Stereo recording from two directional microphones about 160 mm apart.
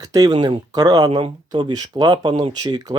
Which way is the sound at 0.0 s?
25° right (ahead or behind).